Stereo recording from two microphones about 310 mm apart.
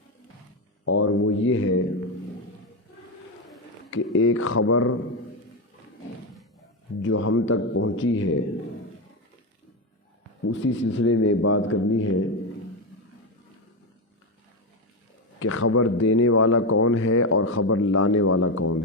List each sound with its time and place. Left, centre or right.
0.9 s a man's voice: left
4.1 s a man's voice: left
7.0 s a man's voice: left
10.4 s a man's voice: left
15.4 s a man's voice: left